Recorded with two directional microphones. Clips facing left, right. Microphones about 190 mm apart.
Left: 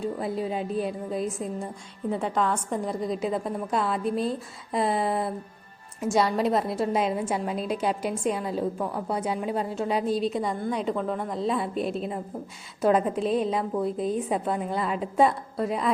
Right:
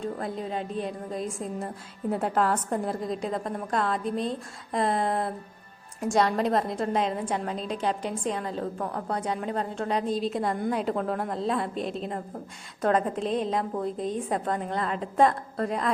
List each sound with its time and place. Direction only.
0.0 s a woman's voice: 5° left (ahead or behind)